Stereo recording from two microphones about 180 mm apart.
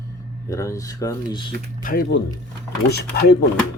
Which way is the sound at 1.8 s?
60° left (ahead or behind).